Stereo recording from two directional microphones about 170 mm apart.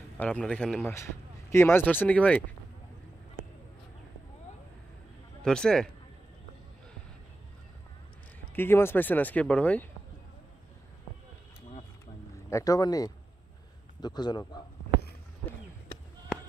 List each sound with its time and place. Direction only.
0.2 s speech: 5° left (ahead or behind)
5.4 s speech: 5° left (ahead or behind)
8.5 s speech: 15° left (ahead or behind)
12.4 s speech: 20° left (ahead or behind)